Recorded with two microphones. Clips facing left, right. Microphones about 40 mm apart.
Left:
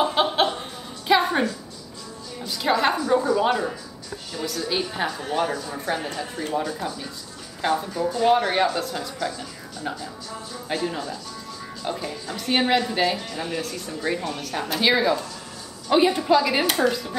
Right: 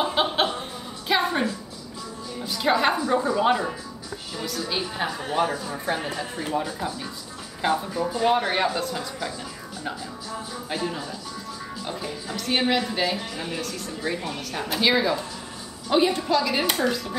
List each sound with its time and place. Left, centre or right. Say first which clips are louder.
0.0 s chuckle: left 2 dB; centre
2.4 s speech: even; centre
12.4 s speech: left 2 dB; centre
13.6 s a woman's voice: left 1 dB; centre